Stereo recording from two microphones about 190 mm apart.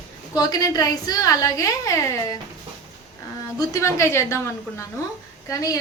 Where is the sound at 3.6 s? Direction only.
15° left (ahead or behind).